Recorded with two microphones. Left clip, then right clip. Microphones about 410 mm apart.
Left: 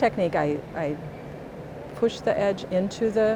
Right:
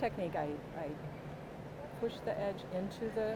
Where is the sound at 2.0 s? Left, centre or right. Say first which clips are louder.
Left 14 dB; left.